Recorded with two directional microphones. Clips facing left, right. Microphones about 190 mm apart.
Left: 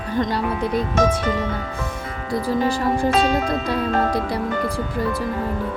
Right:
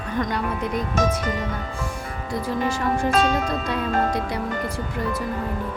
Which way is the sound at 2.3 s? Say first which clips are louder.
Left 4 dB; 35° left (ahead or behind).